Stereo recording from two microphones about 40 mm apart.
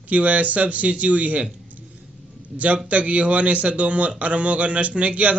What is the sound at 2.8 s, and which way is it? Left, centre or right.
A man's voice, right.